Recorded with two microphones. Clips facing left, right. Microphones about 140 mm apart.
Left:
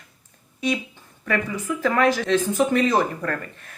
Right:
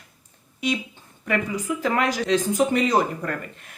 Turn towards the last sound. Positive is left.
turn(degrees=-15)  # may be behind; listen again after turning